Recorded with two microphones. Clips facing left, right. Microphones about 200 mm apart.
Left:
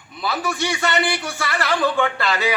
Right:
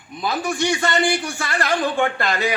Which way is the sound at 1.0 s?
50° right (ahead or behind).